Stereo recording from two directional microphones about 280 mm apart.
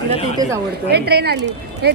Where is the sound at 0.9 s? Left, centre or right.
Right.